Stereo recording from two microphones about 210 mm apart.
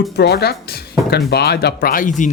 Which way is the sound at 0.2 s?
50° left (ahead or behind).